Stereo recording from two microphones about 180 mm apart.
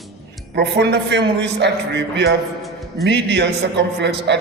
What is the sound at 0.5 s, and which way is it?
A man's voice, 70° right (ahead or behind).